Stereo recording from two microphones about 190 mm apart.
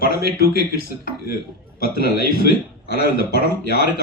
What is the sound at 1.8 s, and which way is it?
Speech, 55° left (ahead or behind).